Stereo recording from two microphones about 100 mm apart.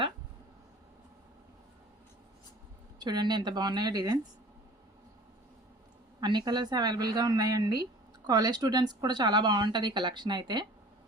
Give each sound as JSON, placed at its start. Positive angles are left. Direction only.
{"t": 3.0, "sound": "a woman's voice", "side_deg": -45}
{"t": 6.1, "sound": "a woman's voice", "side_deg": -45}